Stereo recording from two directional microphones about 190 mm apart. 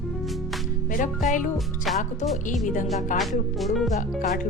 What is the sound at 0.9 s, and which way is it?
Speech, 40° left (ahead or behind).